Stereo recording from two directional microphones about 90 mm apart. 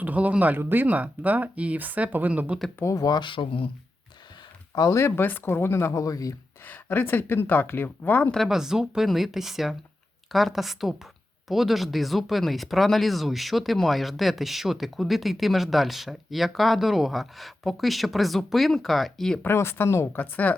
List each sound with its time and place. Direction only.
0.0 s speech: 15° right (ahead or behind)
2.7 s speech: 35° left (ahead or behind)
3.2 s speech: 80° left
4.7 s speech: 40° left (ahead or behind)
6.7 s speech: 20° left (ahead or behind)
8.3 s speech: centre (ahead or behind)
19.4 s speech: 25° left (ahead or behind)
20.3 s a woman's voice: 15° left (ahead or behind)